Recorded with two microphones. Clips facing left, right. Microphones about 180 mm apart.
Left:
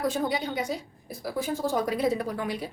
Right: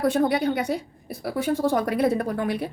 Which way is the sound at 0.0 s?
65° right (ahead or behind).